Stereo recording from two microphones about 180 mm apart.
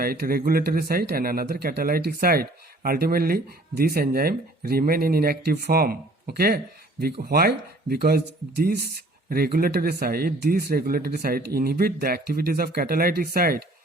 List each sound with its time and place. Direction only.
0.0 s speech: 55° right (ahead or behind)